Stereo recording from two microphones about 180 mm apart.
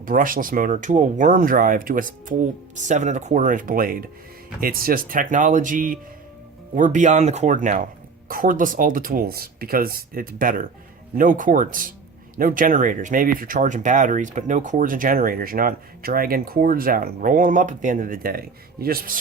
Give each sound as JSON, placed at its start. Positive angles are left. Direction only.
{"t": 0.0, "sound": "speech", "side_deg": -50}